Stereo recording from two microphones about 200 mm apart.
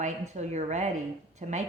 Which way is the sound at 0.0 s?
35° right (ahead or behind).